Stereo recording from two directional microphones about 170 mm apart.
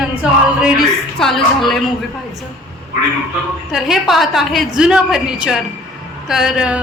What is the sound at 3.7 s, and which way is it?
A woman's voice, centre (ahead or behind).